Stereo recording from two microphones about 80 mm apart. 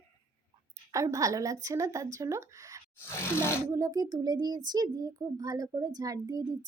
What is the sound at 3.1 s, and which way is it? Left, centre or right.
Speech, left.